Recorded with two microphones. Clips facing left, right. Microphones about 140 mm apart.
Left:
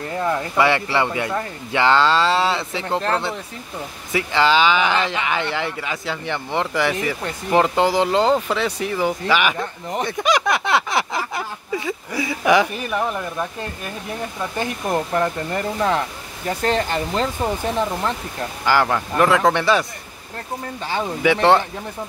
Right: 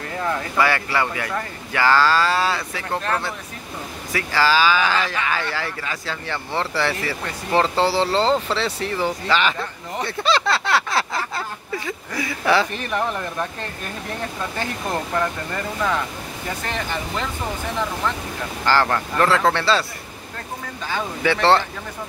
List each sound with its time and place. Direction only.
0.2 s speech: 20° left (ahead or behind)
14.6 s speech: 20° left (ahead or behind)
18.7 s speech: 10° left (ahead or behind)
21.2 s speech: 15° left (ahead or behind)